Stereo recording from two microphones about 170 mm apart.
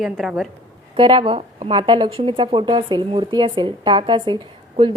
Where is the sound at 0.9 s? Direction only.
30° right (ahead or behind).